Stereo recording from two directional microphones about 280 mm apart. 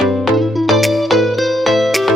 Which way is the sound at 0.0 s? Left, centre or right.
Centre.